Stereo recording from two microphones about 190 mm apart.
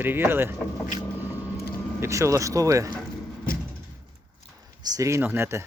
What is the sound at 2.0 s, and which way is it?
Speech, 15° right (ahead or behind).